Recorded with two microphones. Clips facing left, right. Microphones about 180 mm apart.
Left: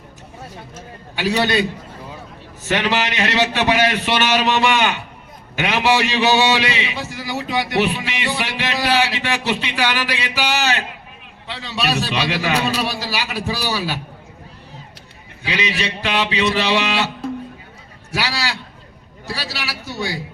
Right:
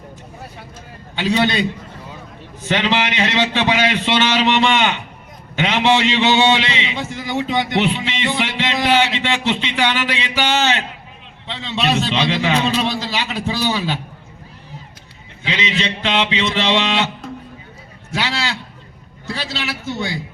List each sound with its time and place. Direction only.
1.1 s a man's voice: 20° right (ahead or behind)
2.6 s a man's voice: 20° right (ahead or behind)
15.4 s a man's voice: 20° right (ahead or behind)
18.1 s a man's voice: 20° right (ahead or behind)